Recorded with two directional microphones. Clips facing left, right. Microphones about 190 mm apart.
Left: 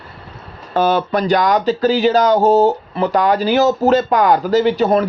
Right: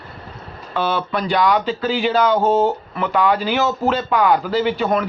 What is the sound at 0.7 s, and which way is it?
Speech, 40° left (ahead or behind).